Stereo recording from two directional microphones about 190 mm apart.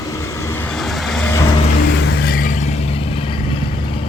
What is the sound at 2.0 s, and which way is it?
Vehicle, 55° left (ahead or behind).